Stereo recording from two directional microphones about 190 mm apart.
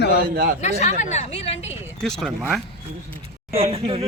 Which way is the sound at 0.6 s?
35° left (ahead or behind).